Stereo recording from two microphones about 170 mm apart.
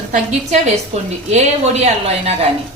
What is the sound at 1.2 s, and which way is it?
A woman's voice, 40° right (ahead or behind).